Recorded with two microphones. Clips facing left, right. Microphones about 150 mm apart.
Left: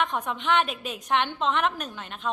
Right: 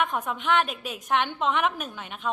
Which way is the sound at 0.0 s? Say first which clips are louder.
Even; 5° right (ahead or behind).